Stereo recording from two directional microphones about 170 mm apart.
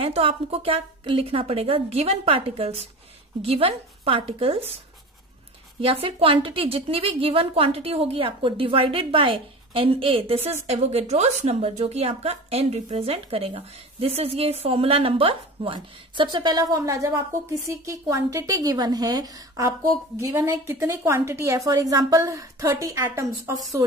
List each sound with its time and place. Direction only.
0.0 s speech: 35° right (ahead or behind)
5.8 s a woman's voice: 35° right (ahead or behind)